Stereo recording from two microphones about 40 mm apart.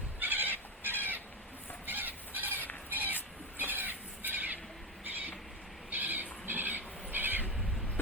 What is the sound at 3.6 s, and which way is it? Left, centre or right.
Squeal, right.